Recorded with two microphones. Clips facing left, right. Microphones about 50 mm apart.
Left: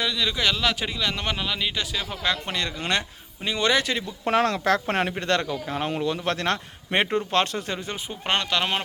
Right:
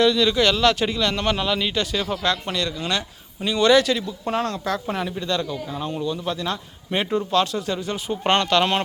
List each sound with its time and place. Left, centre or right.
0.0 s speech: centre
2.5 s speech: left
3.4 s speech: left
4.3 s speech: left
7.3 s speech: left
8.3 s speech: centre